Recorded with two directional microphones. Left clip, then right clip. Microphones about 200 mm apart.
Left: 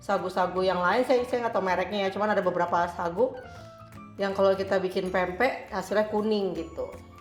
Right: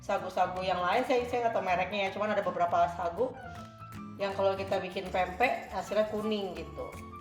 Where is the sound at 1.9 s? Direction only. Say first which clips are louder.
Left 4 dB; 35° left (ahead or behind).